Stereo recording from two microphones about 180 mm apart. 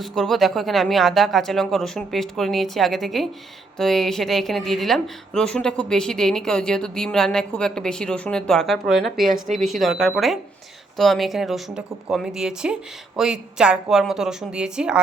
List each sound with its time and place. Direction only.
0.0 s speech: centre (ahead or behind)
9.3 s speech: 40° right (ahead or behind)
9.6 s speech: centre (ahead or behind)